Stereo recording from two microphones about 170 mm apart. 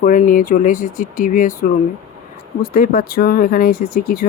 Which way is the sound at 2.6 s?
60° left (ahead or behind).